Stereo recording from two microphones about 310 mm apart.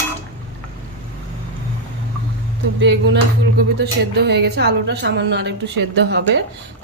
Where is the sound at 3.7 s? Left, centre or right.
Right.